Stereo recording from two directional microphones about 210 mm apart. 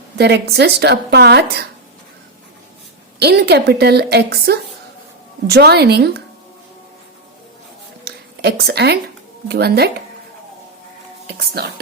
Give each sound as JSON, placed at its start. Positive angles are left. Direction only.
{"t": 0.2, "sound": "a woman's voice", "side_deg": -55}
{"t": 3.2, "sound": "a woman's voice", "side_deg": -50}
{"t": 8.0, "sound": "a sound", "side_deg": -50}
{"t": 9.5, "sound": "a woman's voice", "side_deg": -50}
{"t": 11.3, "sound": "a woman's voice", "side_deg": -50}